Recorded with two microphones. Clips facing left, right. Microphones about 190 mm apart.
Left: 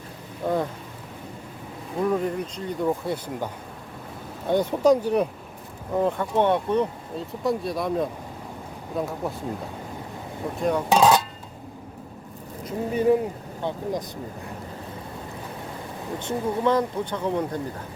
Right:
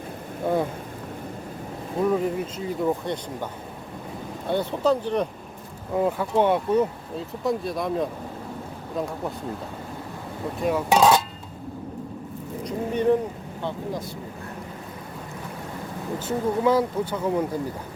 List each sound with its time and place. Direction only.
0.4 s speech: 10° right (ahead or behind)
2.0 s speech: centre (ahead or behind)
5.9 s speech: 5° right (ahead or behind)
10.6 s speech: 5° right (ahead or behind)
12.6 s speech: 5° left (ahead or behind)
16.1 s speech: 5° right (ahead or behind)